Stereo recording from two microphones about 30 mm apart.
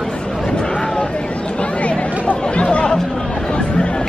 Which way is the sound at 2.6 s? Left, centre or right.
Left.